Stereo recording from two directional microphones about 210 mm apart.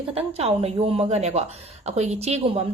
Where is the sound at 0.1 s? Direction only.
30° right (ahead or behind).